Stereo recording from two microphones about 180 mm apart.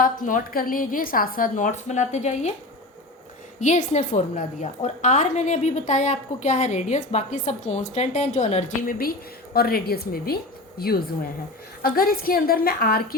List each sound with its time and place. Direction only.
0.0 s a woman's voice: 45° left (ahead or behind)
3.6 s a woman's voice: 40° left (ahead or behind)
9.0 s a woman's voice: 55° left (ahead or behind)